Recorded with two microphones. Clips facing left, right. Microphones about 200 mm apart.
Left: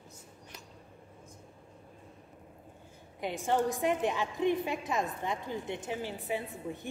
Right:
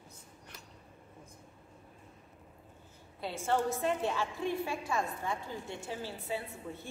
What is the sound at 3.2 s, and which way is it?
A woman's voice, 15° left (ahead or behind).